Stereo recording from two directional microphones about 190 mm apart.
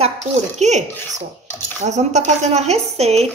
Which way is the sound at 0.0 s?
35° right (ahead or behind).